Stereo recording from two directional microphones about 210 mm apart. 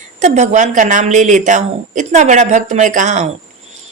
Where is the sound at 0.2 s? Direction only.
35° right (ahead or behind).